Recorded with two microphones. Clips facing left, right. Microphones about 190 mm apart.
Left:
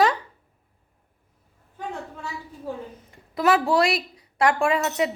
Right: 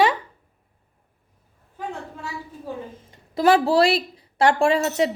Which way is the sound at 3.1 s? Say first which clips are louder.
Right 3 dB; 30° right (ahead or behind).